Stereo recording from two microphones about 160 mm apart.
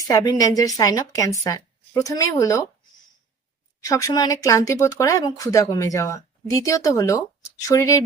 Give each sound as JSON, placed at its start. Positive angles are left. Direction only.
{"t": 0.1, "sound": "speech", "side_deg": 25}
{"t": 3.8, "sound": "speech", "side_deg": 20}